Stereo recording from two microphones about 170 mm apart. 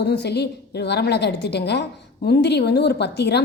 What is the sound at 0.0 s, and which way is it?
A woman's voice, 80° left.